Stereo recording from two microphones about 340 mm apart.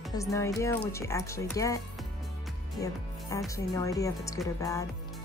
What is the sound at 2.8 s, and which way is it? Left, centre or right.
Speech, centre.